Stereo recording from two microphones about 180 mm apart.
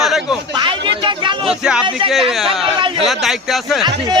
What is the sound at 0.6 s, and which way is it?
Speech, 25° right (ahead or behind).